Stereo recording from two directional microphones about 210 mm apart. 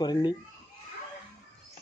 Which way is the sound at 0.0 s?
20° left (ahead or behind).